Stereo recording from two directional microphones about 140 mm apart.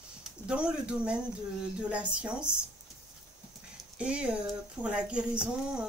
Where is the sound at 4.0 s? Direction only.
10° right (ahead or behind).